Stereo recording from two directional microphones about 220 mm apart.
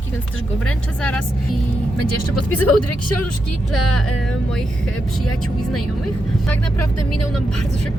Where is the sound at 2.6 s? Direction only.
90° left.